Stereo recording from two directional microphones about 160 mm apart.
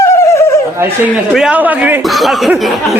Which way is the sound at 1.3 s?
5° right (ahead or behind).